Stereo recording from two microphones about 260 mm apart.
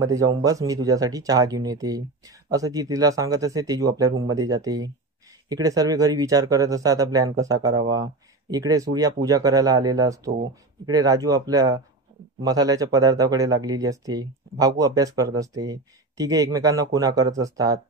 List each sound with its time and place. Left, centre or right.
0.0 s speech: centre
4.1 s speech: right
4.4 s speech: centre